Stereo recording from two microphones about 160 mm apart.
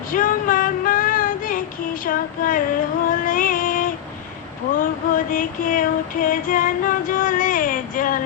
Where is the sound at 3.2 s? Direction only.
60° left (ahead or behind).